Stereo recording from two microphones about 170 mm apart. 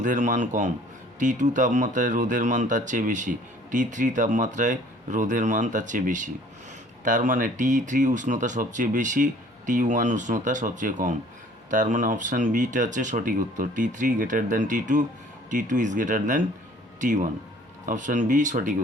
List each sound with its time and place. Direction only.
0.0 s speech: 45° right (ahead or behind)